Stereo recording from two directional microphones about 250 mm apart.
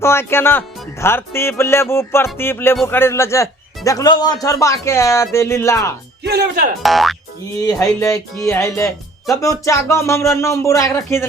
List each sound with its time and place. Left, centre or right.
0.0 s speech: centre
6.2 s speech: right
6.8 s speech: centre
7.6 s speech: centre